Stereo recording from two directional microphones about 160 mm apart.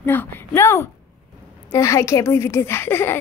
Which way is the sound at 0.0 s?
15° left (ahead or behind).